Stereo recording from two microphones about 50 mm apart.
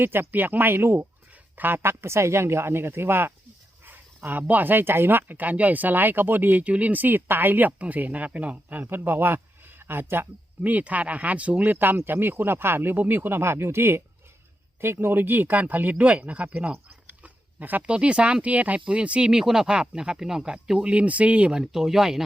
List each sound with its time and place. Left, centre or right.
0.0 s speech: right
0.3 s speech: right
10.6 s speech: right
17.2 s a sound: right
17.8 s speech: right
19.3 s speech: centre